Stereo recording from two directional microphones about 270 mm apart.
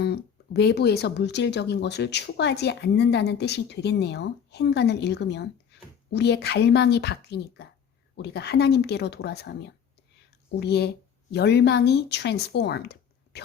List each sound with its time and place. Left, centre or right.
0.0 s speech: left
5.7 s a sound: left
6.1 s speech: left